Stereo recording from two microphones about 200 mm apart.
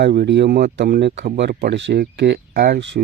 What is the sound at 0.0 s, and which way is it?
Speech, 55° right (ahead or behind).